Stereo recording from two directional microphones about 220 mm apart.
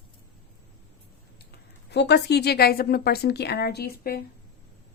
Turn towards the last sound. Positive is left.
turn(degrees=45)  # may be behind; listen again after turning